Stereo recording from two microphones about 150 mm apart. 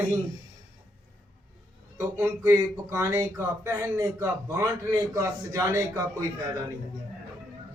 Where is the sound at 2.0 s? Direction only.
20° right (ahead or behind).